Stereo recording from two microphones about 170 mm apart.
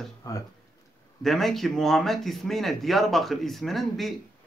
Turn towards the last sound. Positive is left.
turn(degrees=0)  # may be behind; listen again after turning